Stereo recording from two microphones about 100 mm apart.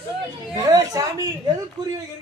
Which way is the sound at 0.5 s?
35° right (ahead or behind).